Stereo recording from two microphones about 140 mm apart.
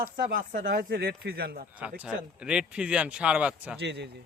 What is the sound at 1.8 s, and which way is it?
Speech, 10° right (ahead or behind).